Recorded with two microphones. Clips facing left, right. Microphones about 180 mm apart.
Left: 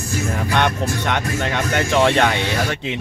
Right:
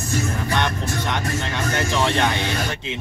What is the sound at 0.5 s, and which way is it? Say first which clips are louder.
Speech: left 6 dB; 65° left (ahead or behind).